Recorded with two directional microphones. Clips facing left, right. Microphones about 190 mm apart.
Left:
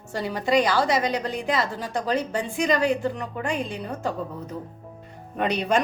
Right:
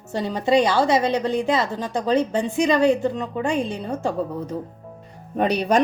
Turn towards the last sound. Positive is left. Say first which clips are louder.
# right 4 dB
turn(degrees=-35)  # may be behind; listen again after turning